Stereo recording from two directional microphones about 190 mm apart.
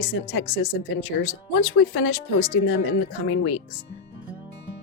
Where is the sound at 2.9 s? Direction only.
90° left.